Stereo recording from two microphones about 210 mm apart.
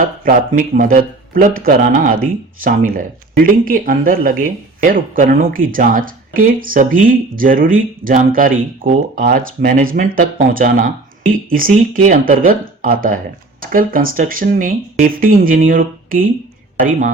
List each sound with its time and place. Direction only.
0.0 s speech: 40° right (ahead or behind)